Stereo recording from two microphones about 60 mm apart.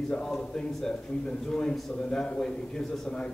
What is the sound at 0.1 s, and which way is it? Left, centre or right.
A man's voice, centre.